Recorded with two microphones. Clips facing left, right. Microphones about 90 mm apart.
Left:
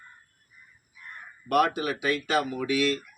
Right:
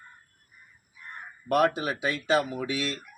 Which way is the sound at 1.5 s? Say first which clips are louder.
Even; 25° right (ahead or behind).